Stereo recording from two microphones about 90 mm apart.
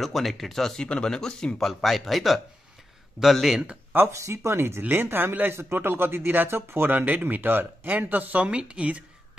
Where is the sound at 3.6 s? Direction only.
25° right (ahead or behind).